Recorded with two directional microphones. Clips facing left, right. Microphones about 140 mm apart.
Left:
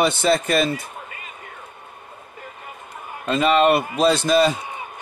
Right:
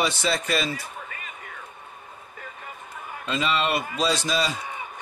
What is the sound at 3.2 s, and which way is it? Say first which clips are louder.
A man's voice: left 9 dB; 55° left (ahead or behind).